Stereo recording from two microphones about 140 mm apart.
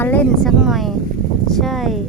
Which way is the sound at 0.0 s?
10° left (ahead or behind).